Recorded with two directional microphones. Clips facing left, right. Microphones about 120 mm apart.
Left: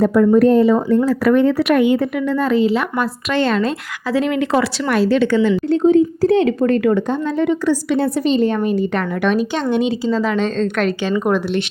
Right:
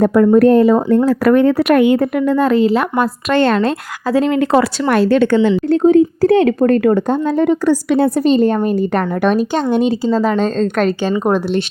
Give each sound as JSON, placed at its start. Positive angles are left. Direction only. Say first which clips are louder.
{"t": 0.0, "sound": "a woman's voice", "louder": "right 2 dB", "side_deg": -60}
{"t": 4.1, "sound": "a woman's voice", "louder": "right 4 dB", "side_deg": -40}